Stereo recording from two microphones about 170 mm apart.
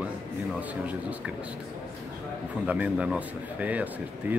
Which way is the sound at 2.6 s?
10° right (ahead or behind).